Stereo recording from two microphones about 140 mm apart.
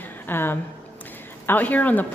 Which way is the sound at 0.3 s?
15° left (ahead or behind).